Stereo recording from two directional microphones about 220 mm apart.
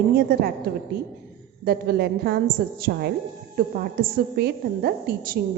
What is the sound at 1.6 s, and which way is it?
A woman's voice, 45° right (ahead or behind).